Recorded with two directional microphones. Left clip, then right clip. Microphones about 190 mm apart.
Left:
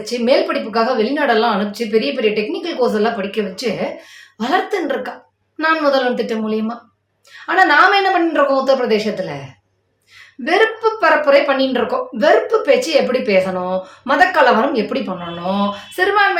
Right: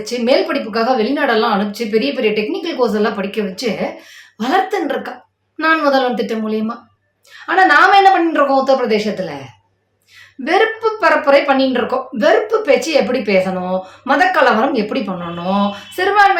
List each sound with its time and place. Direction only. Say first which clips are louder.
0.0 s a woman's voice: even; 10° right (ahead or behind)
10.4 s a woman's voice: even; 10° right (ahead or behind)